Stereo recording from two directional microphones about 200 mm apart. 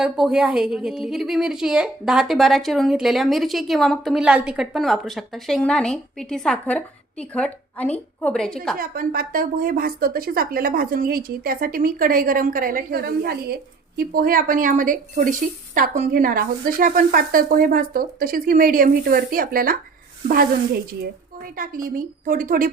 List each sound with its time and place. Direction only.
0.0 s a woman's voice: 5° right (ahead or behind)
8.8 s speech: 45° right (ahead or behind)